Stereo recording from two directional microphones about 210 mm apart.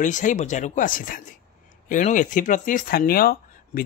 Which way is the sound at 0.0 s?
35° left (ahead or behind).